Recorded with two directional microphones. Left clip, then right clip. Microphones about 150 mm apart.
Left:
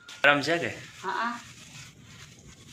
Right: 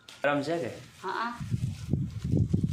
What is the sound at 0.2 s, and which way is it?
Speech, 5° right (ahead or behind).